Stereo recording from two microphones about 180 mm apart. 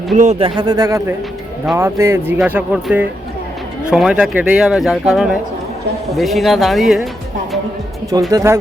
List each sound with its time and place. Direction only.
0.2 s a man's voice: 35° right (ahead or behind); by 7.1 s centre (ahead or behind)
8.3 s speech: 20° right (ahead or behind)